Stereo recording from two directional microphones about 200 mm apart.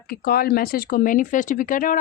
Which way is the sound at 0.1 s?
50° left (ahead or behind).